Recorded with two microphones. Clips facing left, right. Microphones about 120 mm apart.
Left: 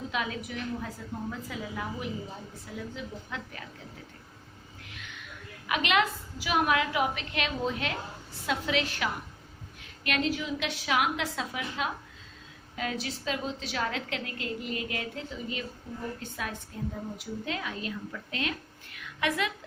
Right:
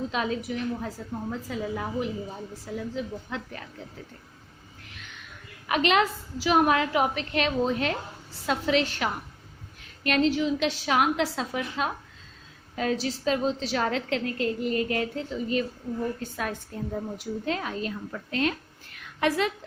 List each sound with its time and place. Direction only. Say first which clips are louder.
0.1 s a woman's voice: right 5 dB; 35° right (ahead or behind)
5.6 s a woman's voice: right 4 dB; 40° right (ahead or behind)
18.9 s a sound: right 5 dB; 35° right (ahead or behind)